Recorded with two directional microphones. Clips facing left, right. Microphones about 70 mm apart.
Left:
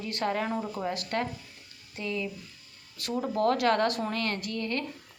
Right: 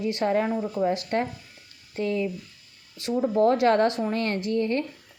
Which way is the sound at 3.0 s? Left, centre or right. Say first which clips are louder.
Right 6 dB; right.